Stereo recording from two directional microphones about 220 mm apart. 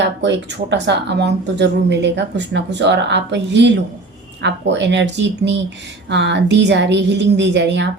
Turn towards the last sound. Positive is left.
turn(degrees=-50)  # may be behind; listen again after turning